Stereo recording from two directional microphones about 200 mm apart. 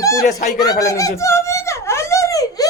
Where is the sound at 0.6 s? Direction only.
15° left (ahead or behind).